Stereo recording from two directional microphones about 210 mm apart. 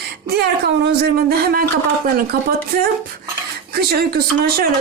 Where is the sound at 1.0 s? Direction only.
45° right (ahead or behind).